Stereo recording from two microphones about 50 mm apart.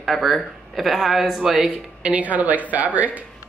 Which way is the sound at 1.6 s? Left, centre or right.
Right.